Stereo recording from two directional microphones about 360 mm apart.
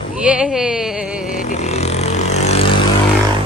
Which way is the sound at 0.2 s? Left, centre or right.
Centre.